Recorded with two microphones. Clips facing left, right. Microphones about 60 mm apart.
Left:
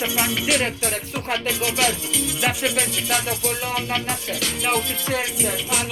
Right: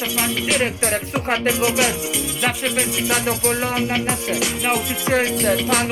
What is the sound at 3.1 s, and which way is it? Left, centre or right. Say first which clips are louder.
Music: right 5 dB; right.